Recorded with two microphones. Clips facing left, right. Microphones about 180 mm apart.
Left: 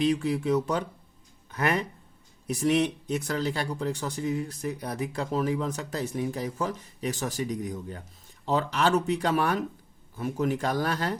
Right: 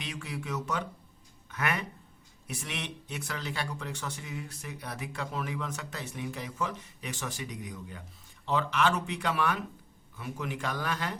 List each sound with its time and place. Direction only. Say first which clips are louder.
0.0 s speech: left 14 dB; 35° left (ahead or behind)